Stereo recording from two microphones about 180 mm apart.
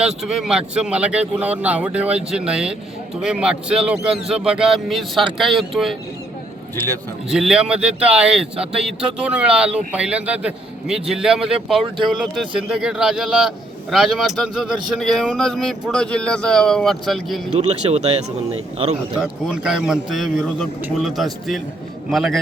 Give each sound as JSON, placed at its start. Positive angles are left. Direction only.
{"t": 0.0, "sound": "speech", "side_deg": -5}
{"t": 6.7, "sound": "speech", "side_deg": 10}
{"t": 7.3, "sound": "speech", "side_deg": -5}
{"t": 17.6, "sound": "speech", "side_deg": -35}
{"t": 19.2, "sound": "speech", "side_deg": -5}